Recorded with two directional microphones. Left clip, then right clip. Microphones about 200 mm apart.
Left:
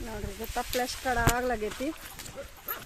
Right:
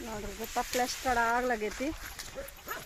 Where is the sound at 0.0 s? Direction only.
5° left (ahead or behind).